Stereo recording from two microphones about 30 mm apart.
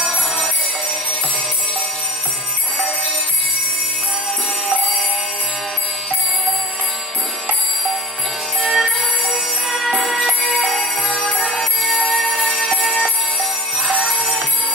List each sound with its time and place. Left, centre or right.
8.5 s jingle bell: centre
9.3 s music: centre
12.5 s music: right
13.8 s music: centre